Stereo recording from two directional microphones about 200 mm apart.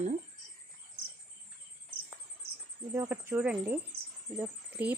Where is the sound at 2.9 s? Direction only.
15° right (ahead or behind).